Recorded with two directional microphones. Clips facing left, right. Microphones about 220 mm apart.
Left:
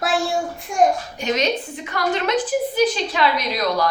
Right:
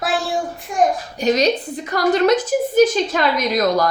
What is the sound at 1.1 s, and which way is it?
A woman's voice, 35° right (ahead or behind).